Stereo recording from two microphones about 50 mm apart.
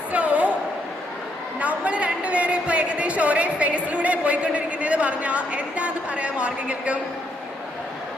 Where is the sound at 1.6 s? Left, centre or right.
Right.